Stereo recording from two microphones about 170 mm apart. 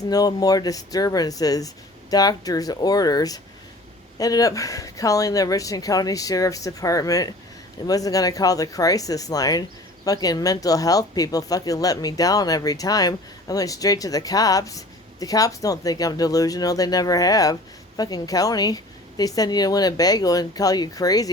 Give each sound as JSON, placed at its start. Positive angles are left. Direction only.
{"t": 0.1, "sound": "speech", "side_deg": 20}